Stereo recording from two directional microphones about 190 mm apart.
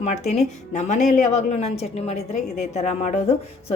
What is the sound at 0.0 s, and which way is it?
Speech, 35° left (ahead or behind).